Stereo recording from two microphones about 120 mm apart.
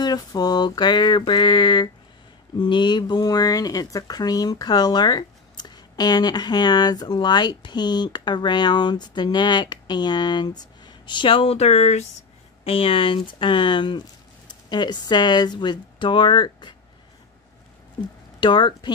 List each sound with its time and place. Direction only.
0.0 s speech: 35° left (ahead or behind); by 12.1 s 65° left (ahead or behind)
12.6 s speech: 50° left (ahead or behind)
18.4 s speech: 40° left (ahead or behind)